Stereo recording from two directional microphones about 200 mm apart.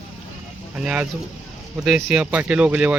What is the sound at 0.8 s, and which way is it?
Speech, 5° right (ahead or behind).